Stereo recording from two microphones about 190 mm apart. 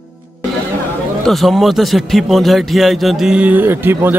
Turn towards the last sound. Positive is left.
turn(degrees=-10)  # may be behind; listen again after turning